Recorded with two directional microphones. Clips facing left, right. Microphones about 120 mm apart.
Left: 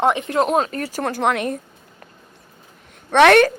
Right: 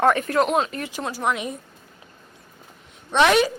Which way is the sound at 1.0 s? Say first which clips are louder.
Left 5 dB; 65° left (ahead or behind).